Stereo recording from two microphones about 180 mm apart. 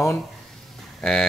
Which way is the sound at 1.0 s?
5° left (ahead or behind).